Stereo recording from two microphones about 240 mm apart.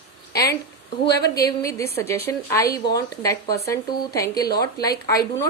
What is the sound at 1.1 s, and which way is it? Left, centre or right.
Speech, left.